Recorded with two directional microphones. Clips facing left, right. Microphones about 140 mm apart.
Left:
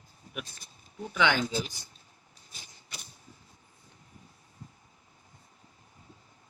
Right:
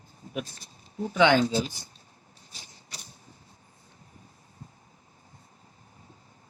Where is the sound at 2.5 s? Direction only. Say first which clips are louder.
Right 1 dB; 40° right (ahead or behind).